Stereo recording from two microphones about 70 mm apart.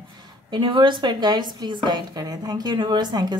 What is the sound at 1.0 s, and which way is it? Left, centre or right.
Speech, right.